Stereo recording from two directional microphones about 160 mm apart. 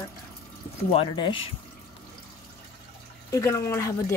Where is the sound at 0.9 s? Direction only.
30° left (ahead or behind).